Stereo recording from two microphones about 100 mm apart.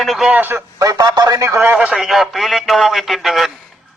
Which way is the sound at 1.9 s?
Centre (ahead or behind).